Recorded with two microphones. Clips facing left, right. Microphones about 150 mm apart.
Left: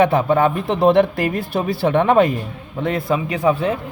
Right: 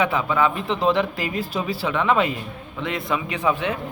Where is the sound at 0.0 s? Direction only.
45° left (ahead or behind).